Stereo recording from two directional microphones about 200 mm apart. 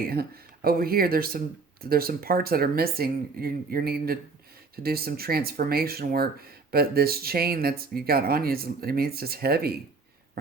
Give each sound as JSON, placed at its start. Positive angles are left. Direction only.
{"t": 0.1, "sound": "speech", "side_deg": -50}